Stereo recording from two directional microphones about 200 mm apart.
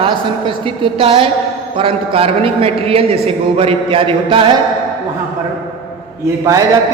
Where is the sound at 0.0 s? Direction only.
25° right (ahead or behind).